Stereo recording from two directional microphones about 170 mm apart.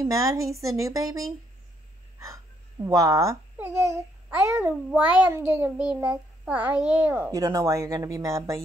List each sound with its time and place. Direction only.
0.0 s a woman's voice: 20° right (ahead or behind)